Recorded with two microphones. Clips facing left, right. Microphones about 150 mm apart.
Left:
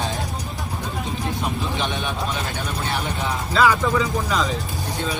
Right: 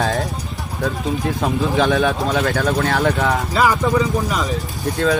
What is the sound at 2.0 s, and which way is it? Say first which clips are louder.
Speech: right 9 dB; 85° right.